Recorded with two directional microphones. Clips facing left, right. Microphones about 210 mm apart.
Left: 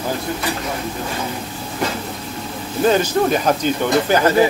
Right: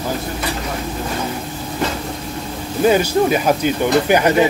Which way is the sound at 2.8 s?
10° right (ahead or behind).